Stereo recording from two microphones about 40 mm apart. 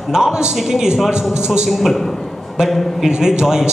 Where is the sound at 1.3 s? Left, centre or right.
Centre.